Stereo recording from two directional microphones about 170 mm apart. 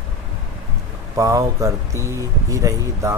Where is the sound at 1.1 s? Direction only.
20° right (ahead or behind).